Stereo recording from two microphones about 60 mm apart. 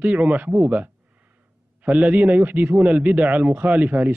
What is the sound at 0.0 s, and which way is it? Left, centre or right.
A man's voice, right.